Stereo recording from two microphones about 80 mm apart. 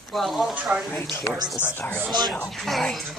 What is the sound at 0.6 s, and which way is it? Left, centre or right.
Speech, centre.